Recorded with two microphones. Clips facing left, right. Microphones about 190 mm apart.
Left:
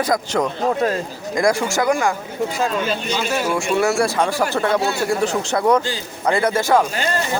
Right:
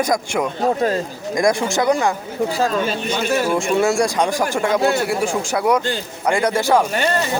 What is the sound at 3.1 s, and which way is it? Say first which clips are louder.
Speech: right 1 dB; 55° right (ahead or behind).